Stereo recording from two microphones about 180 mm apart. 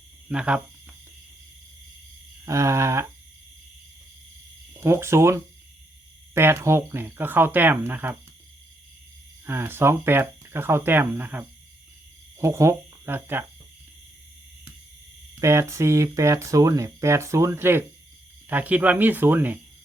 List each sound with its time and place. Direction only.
0.3 s speech: 5° right (ahead or behind)
2.4 s speech: 15° right (ahead or behind)
4.8 s speech: 15° right (ahead or behind)
9.5 s speech: 15° right (ahead or behind)
15.4 s speech: 15° right (ahead or behind)